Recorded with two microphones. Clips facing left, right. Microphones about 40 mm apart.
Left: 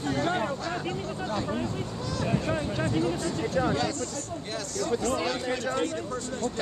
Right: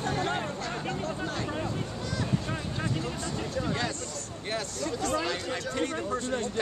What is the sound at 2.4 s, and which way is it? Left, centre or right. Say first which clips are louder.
Speech: left 5 dB; centre.